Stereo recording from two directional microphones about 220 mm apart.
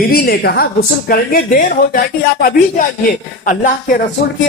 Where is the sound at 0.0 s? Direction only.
45° left (ahead or behind).